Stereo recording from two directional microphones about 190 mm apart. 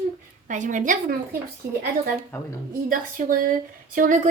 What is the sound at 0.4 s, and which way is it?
Speech, 40° right (ahead or behind).